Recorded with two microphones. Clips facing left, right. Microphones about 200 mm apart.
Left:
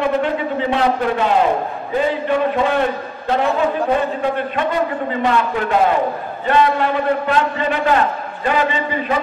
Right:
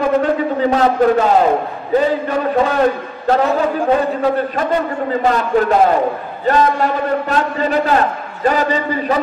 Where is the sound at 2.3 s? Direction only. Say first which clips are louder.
Right 1 dB; 40° right (ahead or behind).